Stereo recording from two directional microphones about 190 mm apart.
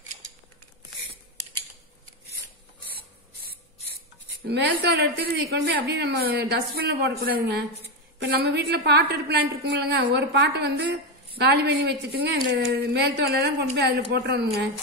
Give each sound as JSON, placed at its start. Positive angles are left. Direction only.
{"t": 4.5, "sound": "a woman's voice", "side_deg": -60}